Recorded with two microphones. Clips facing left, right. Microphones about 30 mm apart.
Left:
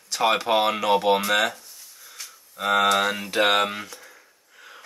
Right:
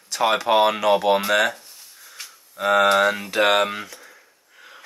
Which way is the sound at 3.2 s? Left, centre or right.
Centre.